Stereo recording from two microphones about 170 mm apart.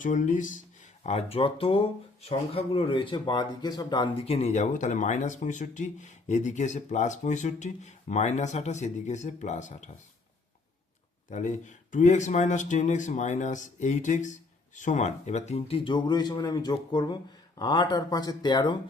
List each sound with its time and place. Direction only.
0.0 s speech: 50° left (ahead or behind)
1.0 s speech: 35° left (ahead or behind)
4.3 s speech: 40° left (ahead or behind)
11.3 s speech: 45° left (ahead or behind); by 18.8 s 25° left (ahead or behind)